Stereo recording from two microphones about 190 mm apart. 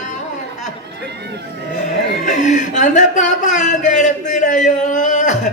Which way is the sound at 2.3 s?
40° left (ahead or behind).